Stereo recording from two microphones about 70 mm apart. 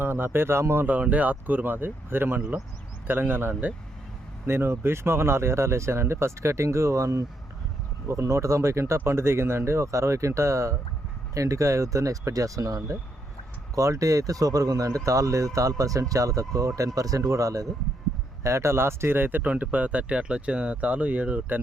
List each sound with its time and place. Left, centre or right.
0.0 s speech: right
0.9 s speech: right